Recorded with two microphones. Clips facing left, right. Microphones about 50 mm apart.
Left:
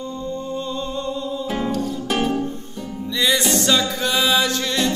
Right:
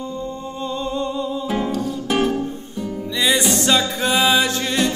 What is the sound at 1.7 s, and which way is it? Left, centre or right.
Music, centre.